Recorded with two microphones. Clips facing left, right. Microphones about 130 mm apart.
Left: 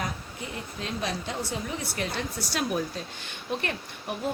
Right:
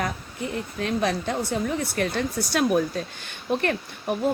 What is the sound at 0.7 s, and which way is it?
Speech, 60° right (ahead or behind).